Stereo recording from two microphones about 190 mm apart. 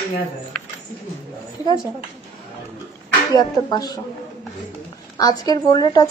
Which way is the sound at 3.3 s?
20° left (ahead or behind).